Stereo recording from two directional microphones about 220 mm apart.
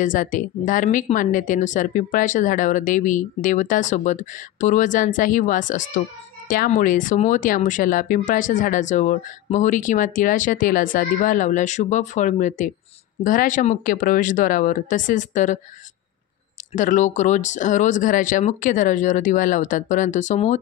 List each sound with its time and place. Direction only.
0.0 s speech: 35° left (ahead or behind)
16.7 s speech: 35° left (ahead or behind)